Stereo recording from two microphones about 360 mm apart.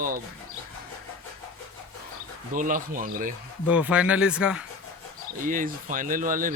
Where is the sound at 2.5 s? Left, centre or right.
Right.